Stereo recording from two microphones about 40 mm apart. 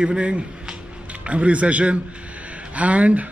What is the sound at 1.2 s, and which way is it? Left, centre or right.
Speech, right.